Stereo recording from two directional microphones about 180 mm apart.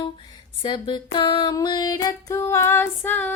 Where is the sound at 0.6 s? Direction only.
25° left (ahead or behind).